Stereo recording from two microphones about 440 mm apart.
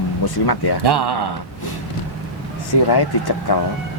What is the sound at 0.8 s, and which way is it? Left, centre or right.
Speech, right.